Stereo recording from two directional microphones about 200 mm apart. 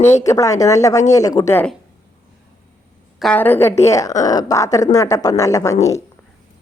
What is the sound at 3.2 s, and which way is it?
Speech, 10° left (ahead or behind).